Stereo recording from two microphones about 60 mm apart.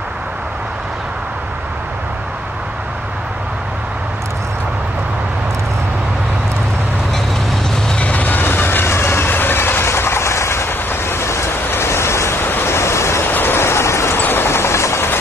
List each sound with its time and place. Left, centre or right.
7.9 s train: left
12.4 s vehicle: left
13.3 s vehicle: left
14.1 s vehicle: left